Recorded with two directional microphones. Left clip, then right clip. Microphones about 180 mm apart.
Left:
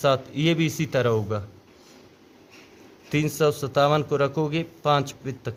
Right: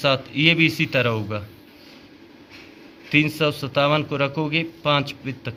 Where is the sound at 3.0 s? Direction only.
45° left (ahead or behind).